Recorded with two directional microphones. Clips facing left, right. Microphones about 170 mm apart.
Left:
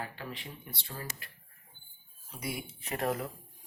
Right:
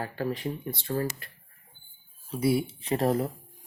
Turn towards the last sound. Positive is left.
turn(degrees=-30)  # may be behind; listen again after turning